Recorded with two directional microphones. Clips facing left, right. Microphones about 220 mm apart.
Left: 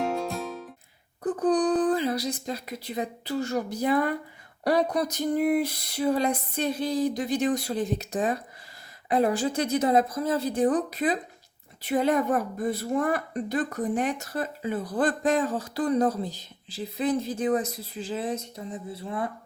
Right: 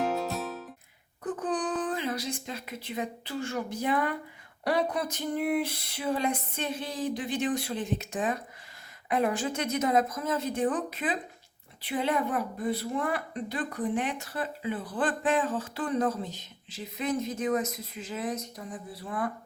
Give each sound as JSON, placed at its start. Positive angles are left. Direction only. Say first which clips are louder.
{"t": 0.0, "sound": "music", "louder": "left 1 dB", "side_deg": 0}
{"t": 1.2, "sound": "a woman's voice", "louder": "left 7 dB", "side_deg": 35}